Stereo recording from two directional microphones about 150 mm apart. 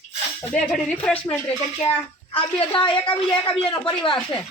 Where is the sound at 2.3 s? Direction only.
35° left (ahead or behind).